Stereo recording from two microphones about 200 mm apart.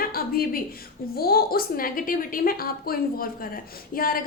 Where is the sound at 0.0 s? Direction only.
50° left (ahead or behind).